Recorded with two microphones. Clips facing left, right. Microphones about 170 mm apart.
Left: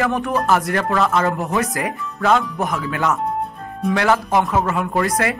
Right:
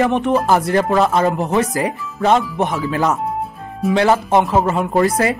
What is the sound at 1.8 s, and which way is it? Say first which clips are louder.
Speech: right 4 dB; 30° right (ahead or behind).